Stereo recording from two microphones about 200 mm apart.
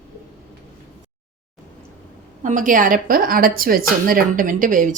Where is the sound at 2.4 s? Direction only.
40° right (ahead or behind).